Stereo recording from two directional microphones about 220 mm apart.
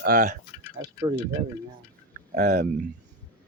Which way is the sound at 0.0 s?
40° right (ahead or behind).